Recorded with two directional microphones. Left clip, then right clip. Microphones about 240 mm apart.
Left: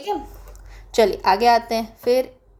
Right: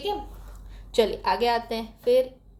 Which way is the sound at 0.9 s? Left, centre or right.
Left.